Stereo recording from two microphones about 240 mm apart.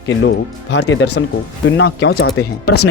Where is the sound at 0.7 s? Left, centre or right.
Left.